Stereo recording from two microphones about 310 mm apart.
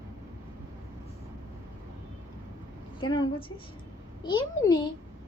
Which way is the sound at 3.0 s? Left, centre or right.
Centre.